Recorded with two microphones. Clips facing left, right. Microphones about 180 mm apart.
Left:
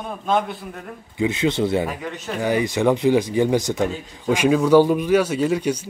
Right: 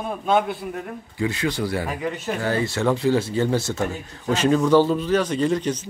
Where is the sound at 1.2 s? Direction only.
20° left (ahead or behind).